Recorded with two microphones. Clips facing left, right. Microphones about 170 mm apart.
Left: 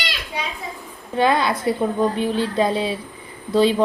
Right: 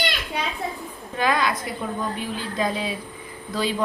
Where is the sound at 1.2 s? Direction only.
30° left (ahead or behind).